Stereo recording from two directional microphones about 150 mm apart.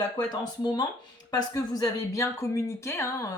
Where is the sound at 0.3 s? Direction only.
30° left (ahead or behind).